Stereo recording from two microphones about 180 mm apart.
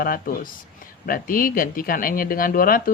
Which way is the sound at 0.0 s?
55° left (ahead or behind).